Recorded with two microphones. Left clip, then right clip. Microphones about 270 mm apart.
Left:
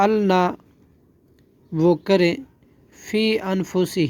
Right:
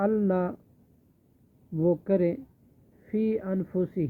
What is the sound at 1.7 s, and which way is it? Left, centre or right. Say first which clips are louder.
Speech: left 8 dB; left.